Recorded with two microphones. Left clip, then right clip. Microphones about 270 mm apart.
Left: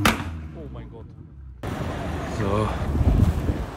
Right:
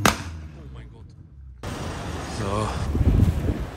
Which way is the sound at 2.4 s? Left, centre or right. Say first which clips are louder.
Left 2 dB; centre.